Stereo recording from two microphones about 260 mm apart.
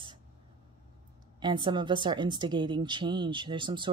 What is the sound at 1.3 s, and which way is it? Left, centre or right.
A woman's voice, centre.